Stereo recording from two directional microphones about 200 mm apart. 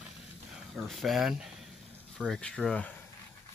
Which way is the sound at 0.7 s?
Centre (ahead or behind).